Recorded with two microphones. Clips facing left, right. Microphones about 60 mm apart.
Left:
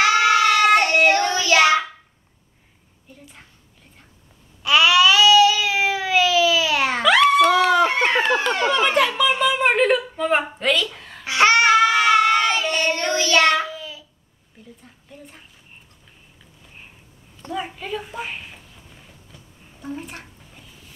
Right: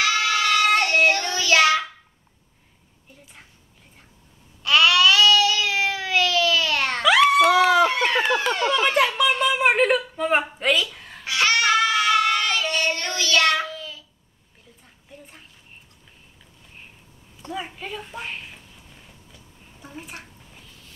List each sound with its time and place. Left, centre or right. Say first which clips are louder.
0.3 s child singing: left 5 dB; left
4.6 s baby cry: left 2 dB; centre
8.6 s a sound: left 1 dB; centre
11.0 s babbling: left 1 dB; centre
11.2 s child singing: left 5 dB; left
13.6 s child singing: left 3 dB; centre
14.8 s a sound: left 3 dB; centre
17.5 s a sound: left 4 dB; centre
20.5 s music: left 3 dB; centre